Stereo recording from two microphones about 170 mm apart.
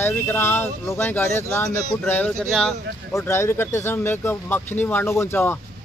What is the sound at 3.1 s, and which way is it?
Speech, 15° left (ahead or behind).